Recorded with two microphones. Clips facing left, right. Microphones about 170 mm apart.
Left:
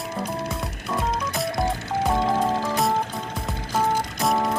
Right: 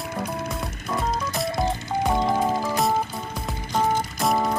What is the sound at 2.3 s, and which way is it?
Music, 10° right (ahead or behind).